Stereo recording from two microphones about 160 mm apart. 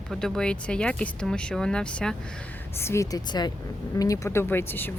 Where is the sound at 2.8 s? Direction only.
15° left (ahead or behind).